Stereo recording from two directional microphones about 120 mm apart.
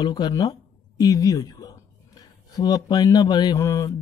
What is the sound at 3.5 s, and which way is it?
Mantra, 25° left (ahead or behind).